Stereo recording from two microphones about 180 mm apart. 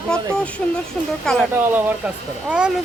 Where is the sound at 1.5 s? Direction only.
10° right (ahead or behind).